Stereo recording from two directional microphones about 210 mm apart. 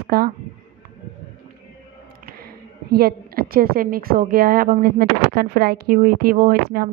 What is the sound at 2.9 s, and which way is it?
A woman's voice, 45° right (ahead or behind).